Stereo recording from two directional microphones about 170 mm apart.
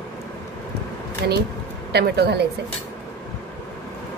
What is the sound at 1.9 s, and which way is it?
Speech, 70° right (ahead or behind).